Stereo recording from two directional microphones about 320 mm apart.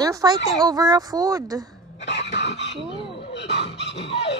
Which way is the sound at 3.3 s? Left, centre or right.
Left.